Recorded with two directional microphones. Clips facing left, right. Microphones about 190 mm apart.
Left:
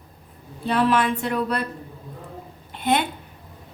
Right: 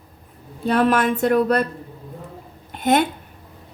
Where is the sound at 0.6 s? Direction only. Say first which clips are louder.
Right 3 dB; 45° right (ahead or behind).